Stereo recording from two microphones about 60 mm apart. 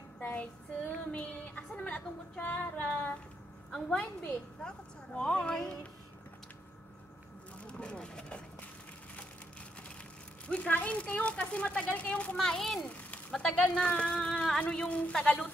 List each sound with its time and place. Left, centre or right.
0.2 s child singing: left
3.7 s speech: centre
7.6 s speech: centre
10.7 s speech: left
12.4 s speech: centre
12.8 s speech: centre